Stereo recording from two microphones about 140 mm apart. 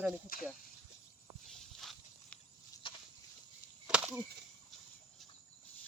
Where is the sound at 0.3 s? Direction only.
90° left.